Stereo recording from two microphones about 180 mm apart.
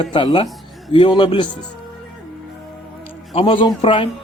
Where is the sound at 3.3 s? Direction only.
30° left (ahead or behind).